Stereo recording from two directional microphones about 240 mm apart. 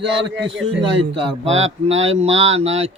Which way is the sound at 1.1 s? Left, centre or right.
Centre.